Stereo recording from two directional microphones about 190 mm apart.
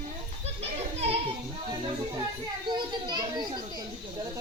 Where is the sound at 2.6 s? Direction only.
25° right (ahead or behind).